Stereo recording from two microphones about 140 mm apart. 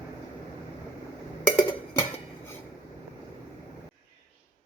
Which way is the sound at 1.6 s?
15° left (ahead or behind).